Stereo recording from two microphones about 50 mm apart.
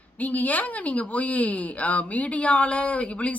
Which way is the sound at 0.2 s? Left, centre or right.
Left.